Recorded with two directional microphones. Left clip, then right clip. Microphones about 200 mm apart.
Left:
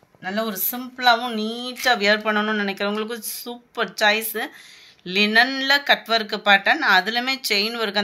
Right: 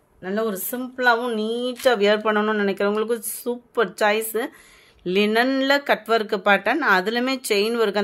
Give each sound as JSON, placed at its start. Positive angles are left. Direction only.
{"t": 0.2, "sound": "speech", "side_deg": -65}